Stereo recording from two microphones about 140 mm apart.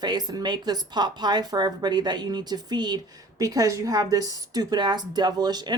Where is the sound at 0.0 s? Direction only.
30° right (ahead or behind).